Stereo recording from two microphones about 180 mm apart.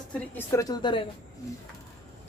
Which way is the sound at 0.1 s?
15° left (ahead or behind).